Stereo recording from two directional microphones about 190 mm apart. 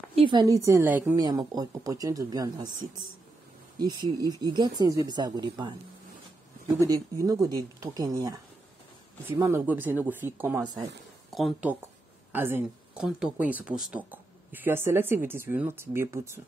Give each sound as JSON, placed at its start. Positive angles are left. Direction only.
{"t": 0.1, "sound": "a woman's voice", "side_deg": -25}
{"t": 0.7, "sound": "speech", "side_deg": -10}
{"t": 1.2, "sound": "speech", "side_deg": -20}
{"t": 10.6, "sound": "speech", "side_deg": -20}
{"t": 11.2, "sound": "speech", "side_deg": 0}